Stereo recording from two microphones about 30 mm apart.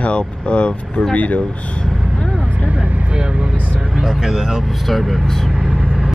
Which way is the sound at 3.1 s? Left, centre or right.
Right.